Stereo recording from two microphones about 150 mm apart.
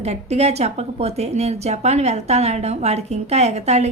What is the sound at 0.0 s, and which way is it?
A woman's voice, 45° right (ahead or behind).